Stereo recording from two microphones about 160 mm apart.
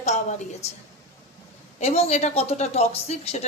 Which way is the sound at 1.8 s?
40° left (ahead or behind).